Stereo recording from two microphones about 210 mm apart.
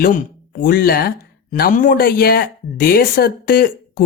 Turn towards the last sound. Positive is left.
turn(degrees=45)  # may be behind; listen again after turning